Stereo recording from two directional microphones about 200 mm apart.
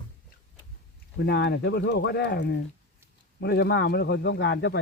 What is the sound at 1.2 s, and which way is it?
Speech, 55° left (ahead or behind).